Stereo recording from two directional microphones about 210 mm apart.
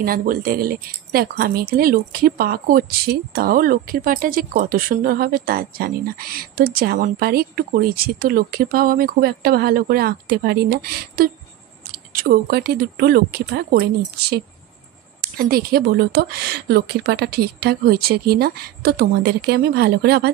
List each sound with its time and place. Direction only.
0.0 s speech: 45° right (ahead or behind)
15.3 s speech: 45° right (ahead or behind)